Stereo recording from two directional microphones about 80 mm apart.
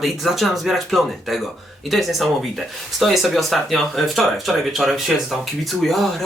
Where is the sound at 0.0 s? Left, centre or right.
Centre.